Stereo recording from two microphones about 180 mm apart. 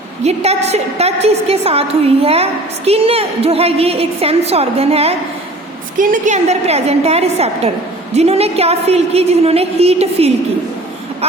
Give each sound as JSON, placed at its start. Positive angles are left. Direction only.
{"t": 0.3, "sound": "a woman's voice", "side_deg": -35}
{"t": 6.0, "sound": "a woman's voice", "side_deg": -45}